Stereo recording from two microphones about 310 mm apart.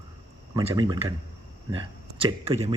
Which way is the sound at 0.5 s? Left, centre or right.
Centre.